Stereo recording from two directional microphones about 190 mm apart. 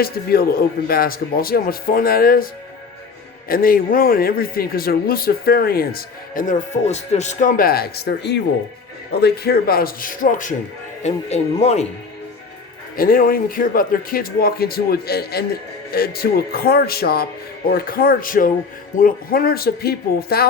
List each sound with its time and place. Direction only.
0.0 s speech: 55° left (ahead or behind)
3.5 s speech: 50° left (ahead or behind); by 11.9 s 35° left (ahead or behind)
13.0 s speech: 50° left (ahead or behind)